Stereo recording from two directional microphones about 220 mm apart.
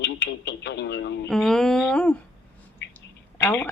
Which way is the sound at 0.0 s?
50° left (ahead or behind).